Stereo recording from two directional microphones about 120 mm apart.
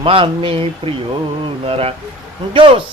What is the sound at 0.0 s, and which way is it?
A man's voice, 45° right (ahead or behind).